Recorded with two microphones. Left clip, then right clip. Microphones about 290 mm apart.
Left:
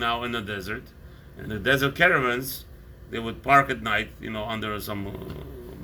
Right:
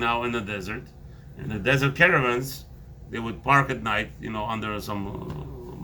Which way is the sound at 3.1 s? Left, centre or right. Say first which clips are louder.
Left 2 dB; right.